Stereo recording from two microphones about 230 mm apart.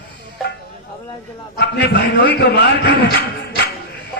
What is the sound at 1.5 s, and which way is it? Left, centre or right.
A man's voice, left.